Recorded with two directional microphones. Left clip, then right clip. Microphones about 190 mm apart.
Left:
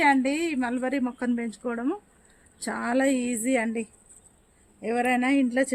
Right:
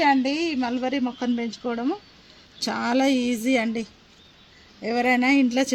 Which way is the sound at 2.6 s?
40° right (ahead or behind).